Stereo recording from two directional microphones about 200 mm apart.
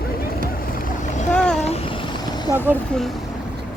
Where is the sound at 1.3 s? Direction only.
5° left (ahead or behind).